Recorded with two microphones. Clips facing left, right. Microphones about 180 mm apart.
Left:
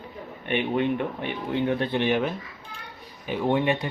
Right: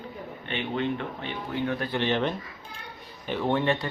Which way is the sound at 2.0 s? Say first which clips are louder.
Left 2 dB; 10° left (ahead or behind).